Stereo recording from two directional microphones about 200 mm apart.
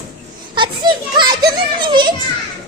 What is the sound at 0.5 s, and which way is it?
Children playing, 25° right (ahead or behind).